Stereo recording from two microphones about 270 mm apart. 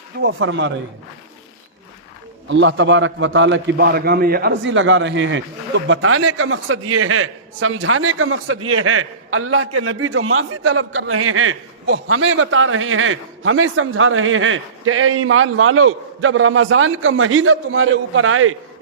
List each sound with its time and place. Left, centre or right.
0.2 s a man's voice: right
2.5 s a man's voice: right